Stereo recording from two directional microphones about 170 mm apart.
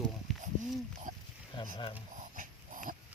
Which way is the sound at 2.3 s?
50° right (ahead or behind).